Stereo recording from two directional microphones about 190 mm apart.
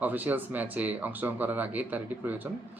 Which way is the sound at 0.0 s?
10° right (ahead or behind).